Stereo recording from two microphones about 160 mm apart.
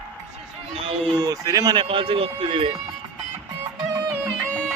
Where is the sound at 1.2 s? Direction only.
25° right (ahead or behind).